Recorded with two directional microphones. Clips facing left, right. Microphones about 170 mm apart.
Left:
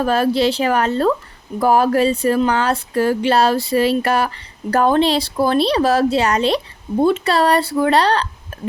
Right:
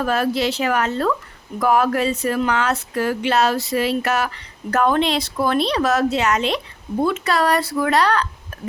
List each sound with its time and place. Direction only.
0.0 s speech: 30° left (ahead or behind)